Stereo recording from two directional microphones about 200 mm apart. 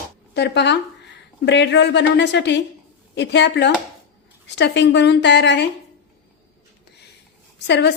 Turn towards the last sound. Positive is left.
turn(degrees=60)  # may be behind; listen again after turning